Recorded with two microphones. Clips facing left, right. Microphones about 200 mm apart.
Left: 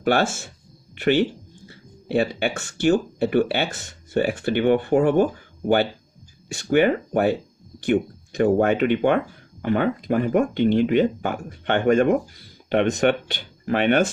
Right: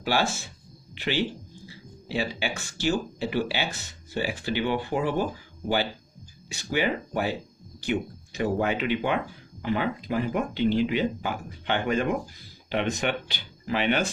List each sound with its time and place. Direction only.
0.0 s speech: 55° left (ahead or behind)
8.4 s speech: 55° left (ahead or behind)